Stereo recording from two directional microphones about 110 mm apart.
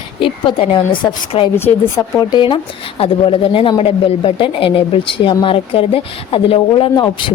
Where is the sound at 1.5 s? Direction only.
20° left (ahead or behind).